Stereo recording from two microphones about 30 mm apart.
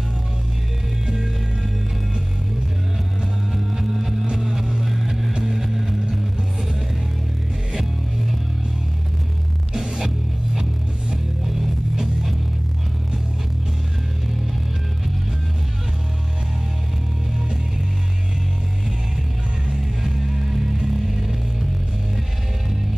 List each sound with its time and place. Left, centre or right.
3.7 s music: centre
5.4 s a sound: centre
9.8 s music: right
19.7 s music: centre